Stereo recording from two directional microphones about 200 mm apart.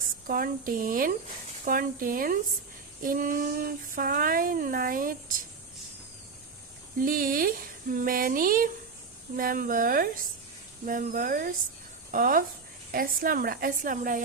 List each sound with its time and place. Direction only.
0.3 s child singing: 45° right (ahead or behind)
7.0 s child singing: 45° right (ahead or behind)